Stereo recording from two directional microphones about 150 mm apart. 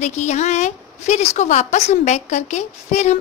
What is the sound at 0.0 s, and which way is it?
A woman's voice, 50° left (ahead or behind).